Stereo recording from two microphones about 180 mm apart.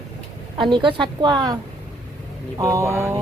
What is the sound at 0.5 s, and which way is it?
A woman's voice, 25° right (ahead or behind).